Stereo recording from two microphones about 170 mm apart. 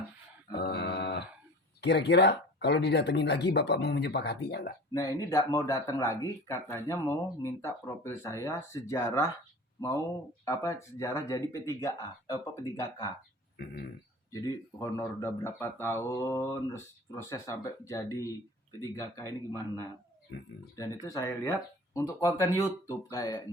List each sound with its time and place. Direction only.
0.5 s a sound: 75° left (ahead or behind)
1.8 s speech: 85° left; by 4.7 s 70° left (ahead or behind)
4.9 s speech: 20° left (ahead or behind)
10.4 s speech: 20° left (ahead or behind)
14.3 s speech: 20° left (ahead or behind)